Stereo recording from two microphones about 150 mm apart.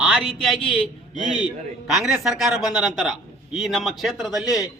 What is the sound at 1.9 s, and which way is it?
A man's voice, 5° right (ahead or behind).